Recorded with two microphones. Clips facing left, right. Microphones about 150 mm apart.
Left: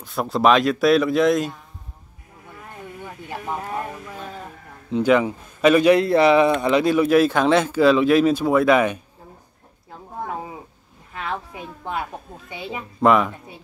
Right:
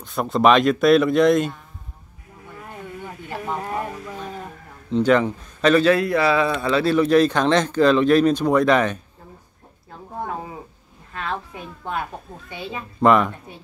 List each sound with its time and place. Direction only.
0.0 s a man's voice: centre (ahead or behind)
3.6 s a sound: centre (ahead or behind)
4.9 s speech: 10° left (ahead or behind)
11.1 s a woman's voice: 10° left (ahead or behind)
13.0 s a man's voice: centre (ahead or behind)